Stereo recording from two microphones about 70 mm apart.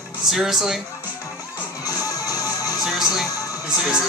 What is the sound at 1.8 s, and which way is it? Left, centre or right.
Music, left.